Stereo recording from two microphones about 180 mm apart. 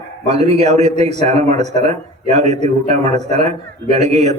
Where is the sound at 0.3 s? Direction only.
35° right (ahead or behind).